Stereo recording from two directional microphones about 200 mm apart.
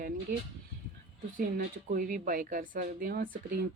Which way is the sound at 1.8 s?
45° right (ahead or behind).